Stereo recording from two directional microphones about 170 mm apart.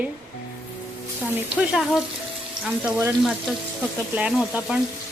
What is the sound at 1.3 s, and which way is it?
Speech, 5° right (ahead or behind).